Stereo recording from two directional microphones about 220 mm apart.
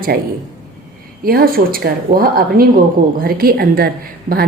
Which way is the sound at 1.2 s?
45° right (ahead or behind).